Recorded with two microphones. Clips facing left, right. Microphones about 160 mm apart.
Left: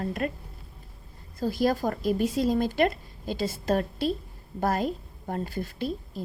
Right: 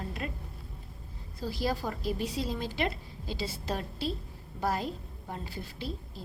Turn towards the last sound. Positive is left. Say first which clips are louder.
# left 7 dB
turn(degrees=50)  # may be behind; listen again after turning